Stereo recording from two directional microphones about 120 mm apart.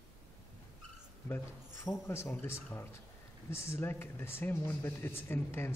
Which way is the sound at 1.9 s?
20° left (ahead or behind).